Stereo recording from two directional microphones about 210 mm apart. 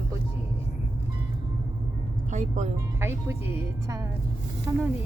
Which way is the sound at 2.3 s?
35° right (ahead or behind).